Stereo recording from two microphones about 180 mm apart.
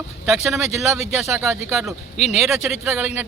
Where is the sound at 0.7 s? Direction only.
40° left (ahead or behind).